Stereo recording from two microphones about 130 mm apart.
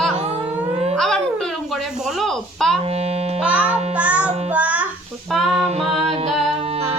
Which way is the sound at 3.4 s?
10° right (ahead or behind).